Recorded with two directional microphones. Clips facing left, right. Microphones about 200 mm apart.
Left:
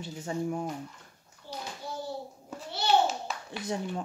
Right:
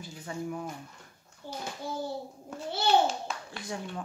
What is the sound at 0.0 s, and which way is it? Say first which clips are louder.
Speech: left 4 dB; 25° left (ahead or behind).